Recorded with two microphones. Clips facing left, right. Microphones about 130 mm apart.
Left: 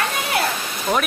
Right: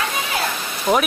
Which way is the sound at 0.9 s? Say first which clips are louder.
Right 3 dB; 20° right (ahead or behind).